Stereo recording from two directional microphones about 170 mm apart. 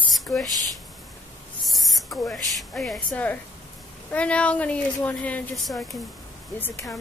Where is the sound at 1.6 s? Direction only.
Centre (ahead or behind).